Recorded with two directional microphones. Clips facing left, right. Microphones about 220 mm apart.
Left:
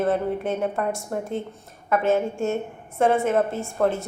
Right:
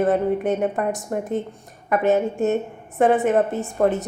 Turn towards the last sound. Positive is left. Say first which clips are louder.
# right 3 dB
turn(degrees=-20)  # may be behind; listen again after turning